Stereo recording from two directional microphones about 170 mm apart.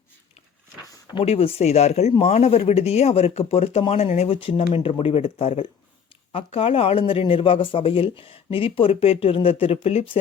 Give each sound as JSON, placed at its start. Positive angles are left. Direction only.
{"t": 1.1, "sound": "speech", "side_deg": 35}